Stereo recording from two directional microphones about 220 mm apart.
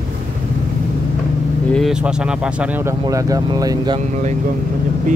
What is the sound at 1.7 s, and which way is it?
Speech, centre (ahead or behind).